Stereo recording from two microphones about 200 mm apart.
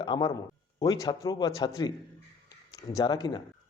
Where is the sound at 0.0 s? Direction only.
20° left (ahead or behind).